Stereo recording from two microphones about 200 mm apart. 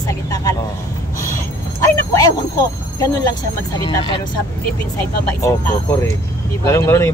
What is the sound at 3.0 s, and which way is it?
Speech, 15° left (ahead or behind).